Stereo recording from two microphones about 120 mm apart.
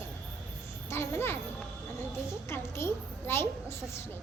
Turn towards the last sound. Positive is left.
turn(degrees=20)  # may be behind; listen again after turning